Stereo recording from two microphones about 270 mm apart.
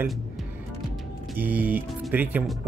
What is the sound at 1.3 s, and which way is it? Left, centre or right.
Speech, centre.